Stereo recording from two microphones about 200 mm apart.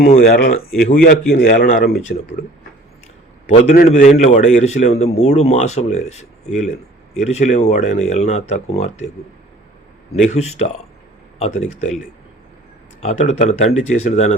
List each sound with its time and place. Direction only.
0.3 s speech: 50° left (ahead or behind)
3.6 s a man's voice: 35° left (ahead or behind)
10.2 s a man's voice: 35° left (ahead or behind)
13.0 s a man's voice: 35° left (ahead or behind)